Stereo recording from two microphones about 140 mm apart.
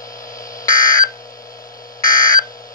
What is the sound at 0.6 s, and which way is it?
Alarm, 25° left (ahead or behind).